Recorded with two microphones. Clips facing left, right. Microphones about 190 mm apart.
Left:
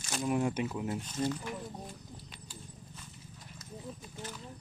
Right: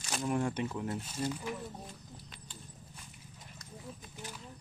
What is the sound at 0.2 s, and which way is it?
Speech, 5° left (ahead or behind).